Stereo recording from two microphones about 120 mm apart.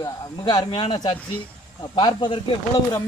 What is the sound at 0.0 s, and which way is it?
Speech, 35° left (ahead or behind).